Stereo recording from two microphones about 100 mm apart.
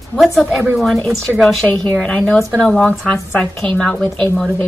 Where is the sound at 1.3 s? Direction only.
5° right (ahead or behind).